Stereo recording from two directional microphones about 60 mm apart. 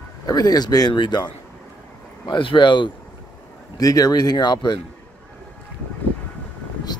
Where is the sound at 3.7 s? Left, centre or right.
Left.